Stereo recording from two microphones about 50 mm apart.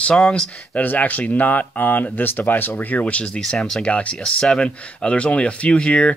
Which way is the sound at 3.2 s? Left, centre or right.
Centre.